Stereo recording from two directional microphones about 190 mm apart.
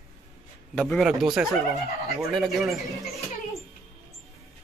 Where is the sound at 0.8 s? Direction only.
Centre (ahead or behind).